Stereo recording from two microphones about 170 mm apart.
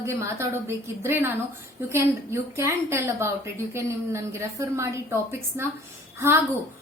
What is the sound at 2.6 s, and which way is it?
A woman's voice, 15° right (ahead or behind).